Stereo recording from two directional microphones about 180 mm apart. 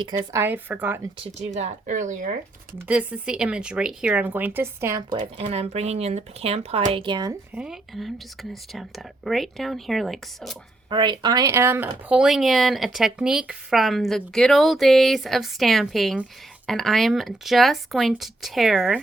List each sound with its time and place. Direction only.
0.0 s speech: 15° right (ahead or behind)
1.5 s speech: 40° right (ahead or behind)
2.8 s speech: 10° right (ahead or behind)
5.2 s speech: 30° right (ahead or behind)
7.5 s speech: 5° right (ahead or behind)
10.8 s speech: 25° right (ahead or behind); by 18.9 s centre (ahead or behind)